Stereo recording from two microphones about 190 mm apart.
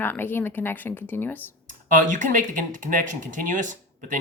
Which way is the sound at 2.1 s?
40° right (ahead or behind).